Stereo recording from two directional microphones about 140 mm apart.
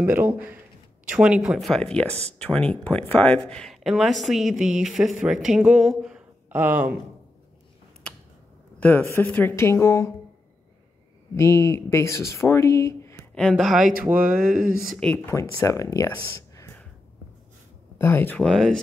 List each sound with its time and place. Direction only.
0.0 s speech: 10° right (ahead or behind)
8.7 s a sound: 10° left (ahead or behind)
9.1 s a woman's voice: 15° left (ahead or behind)
11.3 s speech: 20° left (ahead or behind)
13.3 s speech: 5° left (ahead or behind)
14.1 s a sound: 90° right
14.8 s speech: centre (ahead or behind)
15.0 s speech: 20° left (ahead or behind)
16.3 s a sound: 20° left (ahead or behind)
17.9 s a woman's voice: 15° left (ahead or behind)